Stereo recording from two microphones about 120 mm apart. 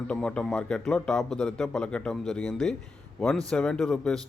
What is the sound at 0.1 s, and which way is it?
A man's voice, 10° left (ahead or behind).